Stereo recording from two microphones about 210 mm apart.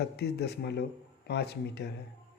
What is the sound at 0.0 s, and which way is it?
Speech, 50° left (ahead or behind).